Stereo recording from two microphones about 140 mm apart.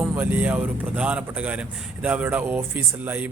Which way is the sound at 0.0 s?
10° right (ahead or behind).